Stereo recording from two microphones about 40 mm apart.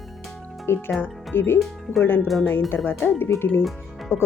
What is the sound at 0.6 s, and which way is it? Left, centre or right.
Speech, left.